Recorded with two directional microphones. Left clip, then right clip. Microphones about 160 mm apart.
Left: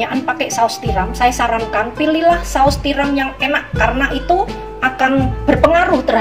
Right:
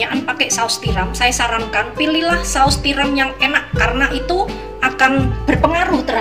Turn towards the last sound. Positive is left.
turn(degrees=40)  # may be behind; listen again after turning